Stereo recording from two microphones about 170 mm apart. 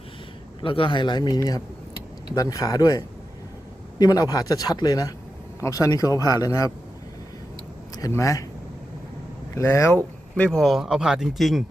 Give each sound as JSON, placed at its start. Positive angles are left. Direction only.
{"t": 0.6, "sound": "speech", "side_deg": 30}
{"t": 7.9, "sound": "speech", "side_deg": 20}
{"t": 9.6, "sound": "speech", "side_deg": 15}